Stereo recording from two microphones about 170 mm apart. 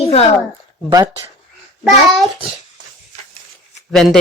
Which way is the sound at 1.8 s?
Centre (ahead or behind).